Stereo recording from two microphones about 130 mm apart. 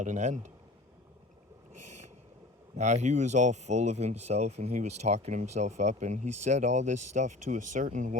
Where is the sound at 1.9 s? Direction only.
60° right (ahead or behind).